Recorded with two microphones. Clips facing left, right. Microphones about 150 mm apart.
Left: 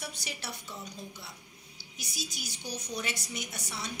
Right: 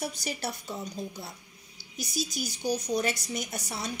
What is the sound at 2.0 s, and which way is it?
Speech, 40° right (ahead or behind).